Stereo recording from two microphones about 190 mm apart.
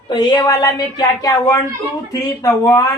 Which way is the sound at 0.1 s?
20° left (ahead or behind).